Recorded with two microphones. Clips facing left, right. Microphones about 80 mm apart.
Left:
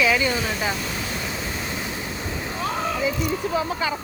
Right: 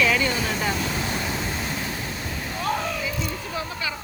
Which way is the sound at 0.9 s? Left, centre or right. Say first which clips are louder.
Right 2 dB; centre.